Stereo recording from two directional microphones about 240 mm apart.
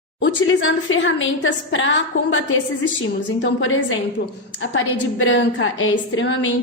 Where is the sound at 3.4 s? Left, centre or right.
Left.